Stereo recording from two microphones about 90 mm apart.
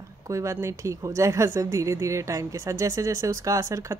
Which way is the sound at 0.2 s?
35° right (ahead or behind).